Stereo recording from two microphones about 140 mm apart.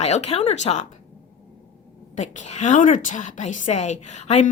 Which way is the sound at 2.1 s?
60° left (ahead or behind).